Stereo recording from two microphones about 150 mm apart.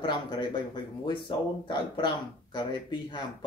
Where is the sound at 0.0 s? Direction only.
30° left (ahead or behind).